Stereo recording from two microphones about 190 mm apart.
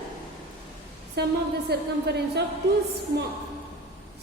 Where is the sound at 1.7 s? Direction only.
60° right (ahead or behind).